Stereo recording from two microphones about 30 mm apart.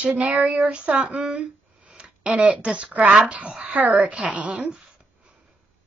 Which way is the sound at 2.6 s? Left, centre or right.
Right.